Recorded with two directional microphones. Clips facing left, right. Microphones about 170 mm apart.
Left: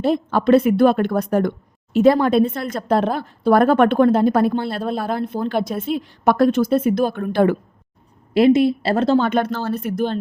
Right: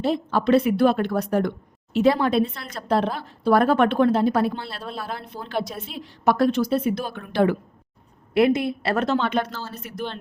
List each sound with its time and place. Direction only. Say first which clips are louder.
0.0 s a woman's voice: left 4 dB; 50° left (ahead or behind)
8.3 s a woman's voice: left 6 dB; 25° left (ahead or behind); by 10.2 s 45° left (ahead or behind)